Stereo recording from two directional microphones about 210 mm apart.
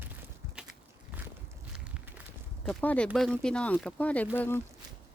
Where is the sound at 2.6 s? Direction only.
5° left (ahead or behind).